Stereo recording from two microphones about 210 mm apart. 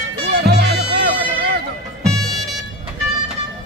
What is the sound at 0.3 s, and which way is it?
Music, 50° right (ahead or behind).